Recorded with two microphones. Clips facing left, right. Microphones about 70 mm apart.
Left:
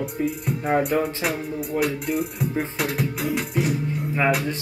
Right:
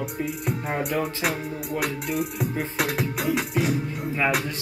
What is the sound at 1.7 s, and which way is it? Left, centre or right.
Speech, left.